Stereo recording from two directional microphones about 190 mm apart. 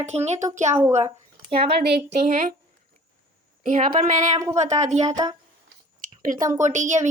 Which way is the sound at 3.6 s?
45° right (ahead or behind).